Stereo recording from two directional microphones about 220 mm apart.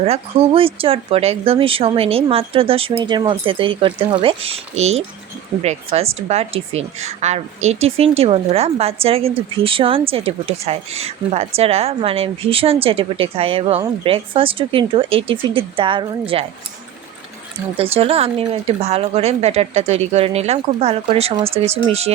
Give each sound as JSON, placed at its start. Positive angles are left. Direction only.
{"t": 0.0, "sound": "a woman's voice", "side_deg": -25}
{"t": 17.7, "sound": "a woman's voice", "side_deg": -25}